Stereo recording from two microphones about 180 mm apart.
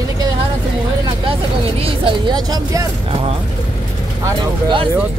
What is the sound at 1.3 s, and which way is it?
Speech, 30° right (ahead or behind).